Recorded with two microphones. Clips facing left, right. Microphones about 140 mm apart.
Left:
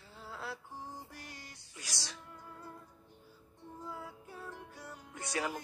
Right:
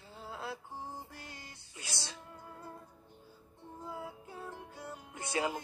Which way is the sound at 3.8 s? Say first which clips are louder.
Right 3 dB; 20° right (ahead or behind).